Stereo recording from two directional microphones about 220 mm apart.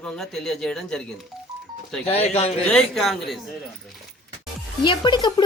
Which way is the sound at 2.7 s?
Centre (ahead or behind).